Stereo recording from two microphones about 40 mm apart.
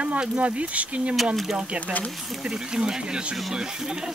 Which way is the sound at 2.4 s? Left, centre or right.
Centre.